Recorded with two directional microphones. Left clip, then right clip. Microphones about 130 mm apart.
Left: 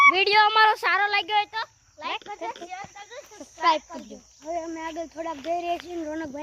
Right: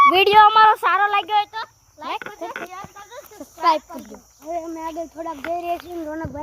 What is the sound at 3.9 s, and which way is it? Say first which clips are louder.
Speech: right 3 dB; centre (ahead or behind).